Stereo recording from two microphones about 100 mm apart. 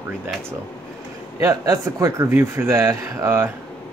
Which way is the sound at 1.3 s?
35° right (ahead or behind).